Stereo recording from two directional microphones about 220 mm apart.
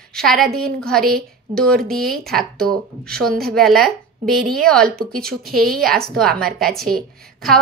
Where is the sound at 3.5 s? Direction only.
Centre (ahead or behind).